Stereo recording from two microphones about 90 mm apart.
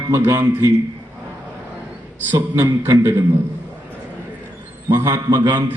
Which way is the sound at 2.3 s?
25° right (ahead or behind).